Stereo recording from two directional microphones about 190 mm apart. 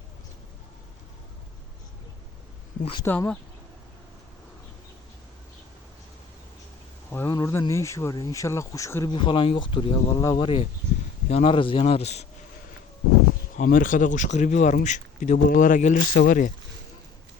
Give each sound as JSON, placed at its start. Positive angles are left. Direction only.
{"t": 3.0, "sound": "speech", "side_deg": 10}
{"t": 7.1, "sound": "speech", "side_deg": 15}
{"t": 9.1, "sound": "speech", "side_deg": 25}
{"t": 13.6, "sound": "speech", "side_deg": 45}